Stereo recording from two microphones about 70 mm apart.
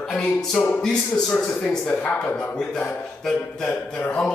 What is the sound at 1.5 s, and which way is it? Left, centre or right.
A man's voice, centre.